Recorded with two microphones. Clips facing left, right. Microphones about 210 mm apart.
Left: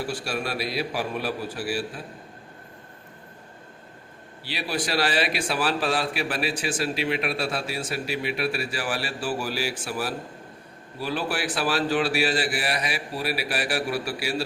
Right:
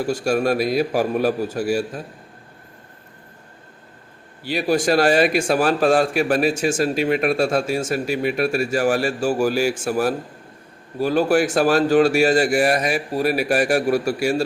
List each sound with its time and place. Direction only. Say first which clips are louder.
0.0 s a man's voice: right 10 dB; 45° right (ahead or behind)
4.4 s a man's voice: right 11 dB; 45° right (ahead or behind)